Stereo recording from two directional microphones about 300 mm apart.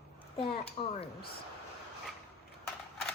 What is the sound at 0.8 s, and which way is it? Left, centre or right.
Speech, centre.